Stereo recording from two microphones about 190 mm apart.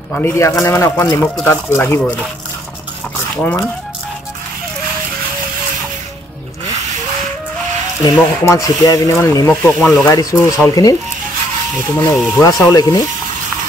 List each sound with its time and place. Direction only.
0.1 s speech: 15° left (ahead or behind)
8.0 s speech: 15° left (ahead or behind)